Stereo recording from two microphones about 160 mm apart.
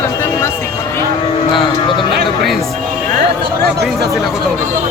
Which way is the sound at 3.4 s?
90° right.